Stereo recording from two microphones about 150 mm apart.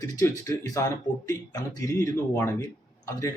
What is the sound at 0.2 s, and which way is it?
Speech, 20° left (ahead or behind).